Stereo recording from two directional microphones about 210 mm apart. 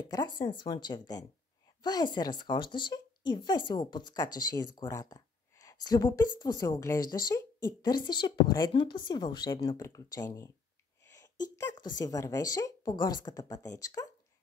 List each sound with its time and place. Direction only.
0.0 s speech: 20° left (ahead or behind)
11.5 s speech: 15° left (ahead or behind)